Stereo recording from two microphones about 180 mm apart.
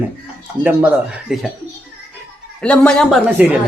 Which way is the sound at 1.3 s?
5° right (ahead or behind).